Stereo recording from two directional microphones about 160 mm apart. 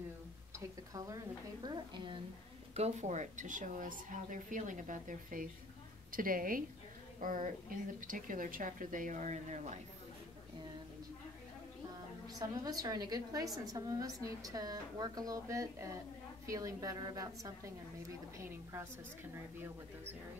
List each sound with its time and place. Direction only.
0.9 s a woman's voice: 20° right (ahead or behind)
2.7 s a woman's voice: 45° right (ahead or behind)
12.4 s a woman's voice: 25° right (ahead or behind)